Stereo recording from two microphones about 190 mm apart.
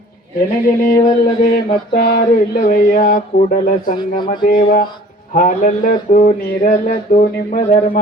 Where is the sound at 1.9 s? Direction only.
55° left (ahead or behind).